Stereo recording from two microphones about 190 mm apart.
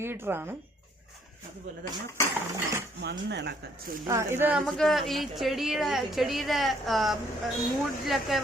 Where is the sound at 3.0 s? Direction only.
65° right (ahead or behind).